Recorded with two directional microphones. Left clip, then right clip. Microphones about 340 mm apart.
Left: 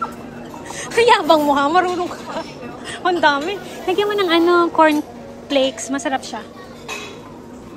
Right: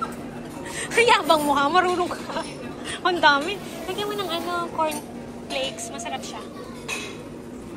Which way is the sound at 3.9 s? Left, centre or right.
Left.